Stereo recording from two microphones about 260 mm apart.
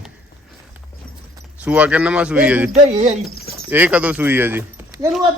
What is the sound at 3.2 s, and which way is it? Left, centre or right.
Speech, centre.